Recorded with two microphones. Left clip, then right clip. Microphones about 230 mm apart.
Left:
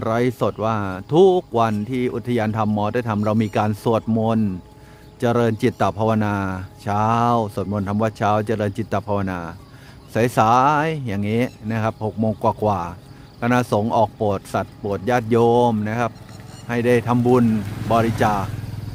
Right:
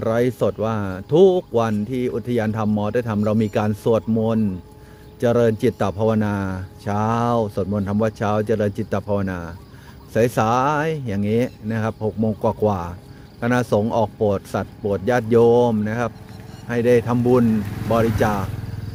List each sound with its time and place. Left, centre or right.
0.0 s speech: centre